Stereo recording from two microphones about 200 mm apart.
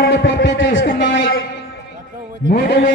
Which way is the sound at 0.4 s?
70° left (ahead or behind).